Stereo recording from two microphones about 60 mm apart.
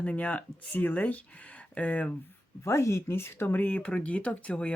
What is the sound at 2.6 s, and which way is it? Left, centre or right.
Speech, left.